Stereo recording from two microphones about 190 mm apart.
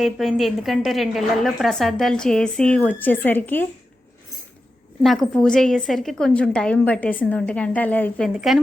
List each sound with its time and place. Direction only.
0.0 s a woman's voice: centre (ahead or behind)
5.0 s a woman's voice: centre (ahead or behind)